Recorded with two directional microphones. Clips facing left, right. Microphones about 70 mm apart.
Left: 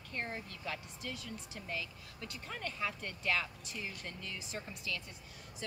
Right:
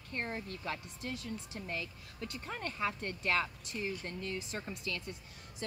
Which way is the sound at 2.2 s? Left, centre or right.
Right.